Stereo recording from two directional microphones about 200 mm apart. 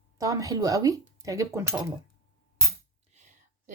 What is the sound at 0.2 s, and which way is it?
Speech, 15° right (ahead or behind).